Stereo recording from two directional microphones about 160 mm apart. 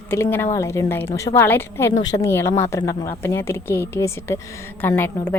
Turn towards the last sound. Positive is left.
turn(degrees=10)  # may be behind; listen again after turning